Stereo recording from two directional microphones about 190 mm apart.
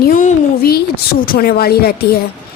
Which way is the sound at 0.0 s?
45° left (ahead or behind).